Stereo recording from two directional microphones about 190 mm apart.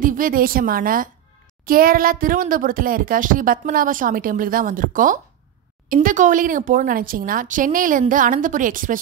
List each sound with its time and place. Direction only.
0.0 s a woman's voice: 45° right (ahead or behind)